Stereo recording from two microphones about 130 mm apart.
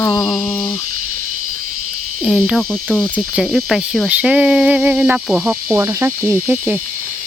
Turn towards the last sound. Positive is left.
turn(degrees=-15)  # may be behind; listen again after turning